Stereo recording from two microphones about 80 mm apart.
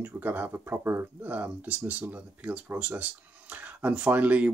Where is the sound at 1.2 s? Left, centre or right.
Centre.